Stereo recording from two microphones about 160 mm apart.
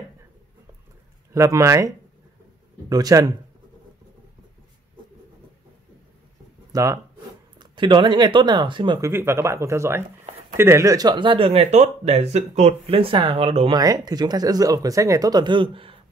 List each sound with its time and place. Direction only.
1.3 s speech: 20° right (ahead or behind)
6.7 s speech: 20° right (ahead or behind)
9.0 s speech: 15° right (ahead or behind); by 13.7 s 35° right (ahead or behind)
13.7 s speech: 25° right (ahead or behind)